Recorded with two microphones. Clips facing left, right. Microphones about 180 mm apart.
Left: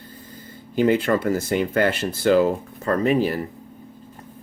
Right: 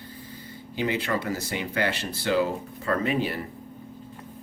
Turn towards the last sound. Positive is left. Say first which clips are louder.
# left 6 dB
turn(degrees=40)  # may be behind; listen again after turning